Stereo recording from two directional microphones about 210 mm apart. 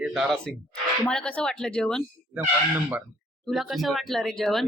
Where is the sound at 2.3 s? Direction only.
5° right (ahead or behind).